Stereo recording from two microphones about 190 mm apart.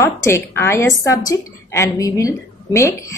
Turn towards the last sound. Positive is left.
turn(degrees=15)  # may be behind; listen again after turning